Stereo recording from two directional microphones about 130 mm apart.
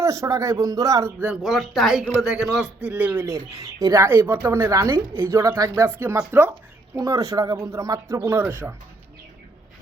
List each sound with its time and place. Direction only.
0.0 s speech: 20° right (ahead or behind)
1.2 s a man's voice: 5° right (ahead or behind)